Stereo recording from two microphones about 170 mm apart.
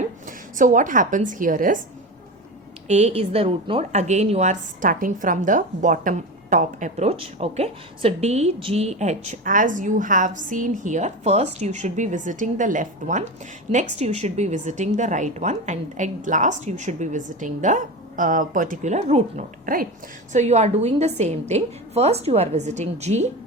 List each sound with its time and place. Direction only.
0.0 s a woman's voice: 50° right (ahead or behind)
2.8 s a woman's voice: 40° right (ahead or behind)
20.3 s a woman's voice: 40° right (ahead or behind)